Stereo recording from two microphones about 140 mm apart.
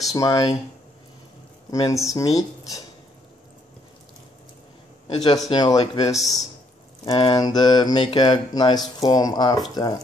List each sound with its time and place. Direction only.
0.0 s speech: 25° left (ahead or behind)
1.7 s speech: 25° left (ahead or behind)
5.1 s speech: 30° left (ahead or behind)